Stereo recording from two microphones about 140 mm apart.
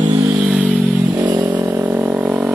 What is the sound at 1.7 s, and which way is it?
Vehicle, 15° right (ahead or behind).